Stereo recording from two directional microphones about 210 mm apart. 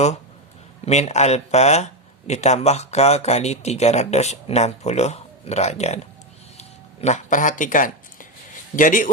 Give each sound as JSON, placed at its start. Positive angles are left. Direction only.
{"t": 0.9, "sound": "speech", "side_deg": 30}
{"t": 6.6, "sound": "a sound", "side_deg": 35}
{"t": 8.7, "sound": "speech", "side_deg": 40}